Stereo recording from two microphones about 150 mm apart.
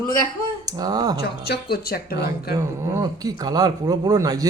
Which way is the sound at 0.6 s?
25° right (ahead or behind).